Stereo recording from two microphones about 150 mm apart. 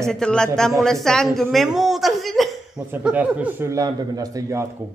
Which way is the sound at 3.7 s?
25° right (ahead or behind).